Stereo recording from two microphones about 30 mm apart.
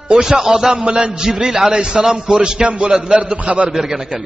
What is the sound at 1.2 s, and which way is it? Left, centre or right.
A man's voice, right.